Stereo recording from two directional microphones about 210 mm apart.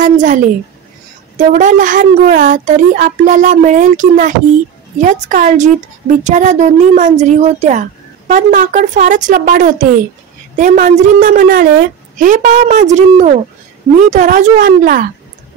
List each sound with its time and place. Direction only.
0.0 s speech: 35° right (ahead or behind)
1.4 s speech: 40° right (ahead or behind)